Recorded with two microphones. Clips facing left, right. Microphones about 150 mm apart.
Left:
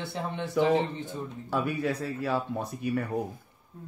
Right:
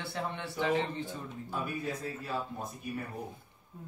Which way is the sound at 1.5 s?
80° left.